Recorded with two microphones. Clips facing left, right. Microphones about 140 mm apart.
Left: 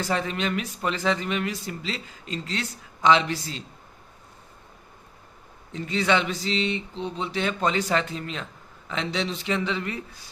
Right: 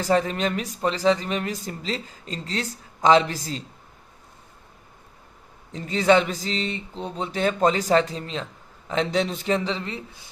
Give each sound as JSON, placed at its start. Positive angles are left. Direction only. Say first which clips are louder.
{"t": 0.0, "sound": "a woman's voice", "louder": "right 5 dB", "side_deg": -40}
{"t": 5.7, "sound": "a woman's voice", "louder": "right 5 dB", "side_deg": -40}